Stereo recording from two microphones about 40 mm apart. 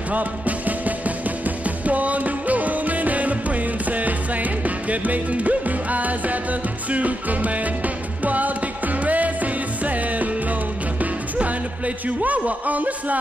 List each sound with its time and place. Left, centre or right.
0.1 s music: right